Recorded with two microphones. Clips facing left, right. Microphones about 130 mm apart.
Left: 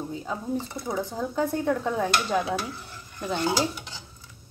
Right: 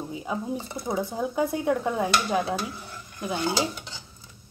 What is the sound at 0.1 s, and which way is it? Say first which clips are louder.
A woman's voice: right 1 dB; 10° right (ahead or behind).